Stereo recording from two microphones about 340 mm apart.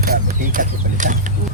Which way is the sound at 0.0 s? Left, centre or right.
Right.